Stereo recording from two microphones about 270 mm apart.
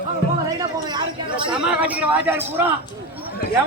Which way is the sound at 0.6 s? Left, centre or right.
Centre.